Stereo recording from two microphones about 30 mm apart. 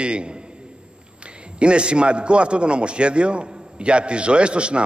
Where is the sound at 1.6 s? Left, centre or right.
Right.